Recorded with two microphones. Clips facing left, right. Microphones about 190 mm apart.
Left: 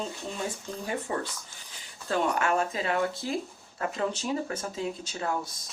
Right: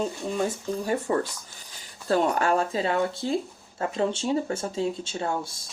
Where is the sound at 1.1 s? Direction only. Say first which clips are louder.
Right 6 dB; 45° right (ahead or behind); by 5.7 s 30° right (ahead or behind).